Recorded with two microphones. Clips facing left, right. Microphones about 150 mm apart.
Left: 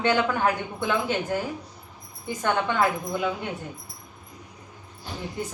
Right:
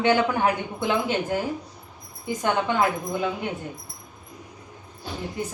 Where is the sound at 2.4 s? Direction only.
15° right (ahead or behind).